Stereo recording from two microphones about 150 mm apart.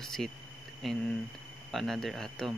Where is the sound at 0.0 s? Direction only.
Centre (ahead or behind).